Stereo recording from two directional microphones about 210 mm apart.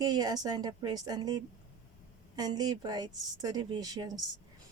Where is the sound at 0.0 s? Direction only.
20° right (ahead or behind).